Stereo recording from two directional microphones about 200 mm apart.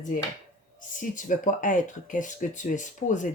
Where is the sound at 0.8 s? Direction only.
40° left (ahead or behind).